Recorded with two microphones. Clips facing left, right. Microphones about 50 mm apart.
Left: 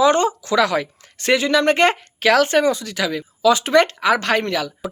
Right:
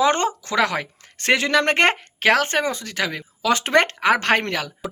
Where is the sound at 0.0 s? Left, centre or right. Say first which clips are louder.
Left 3 dB; right.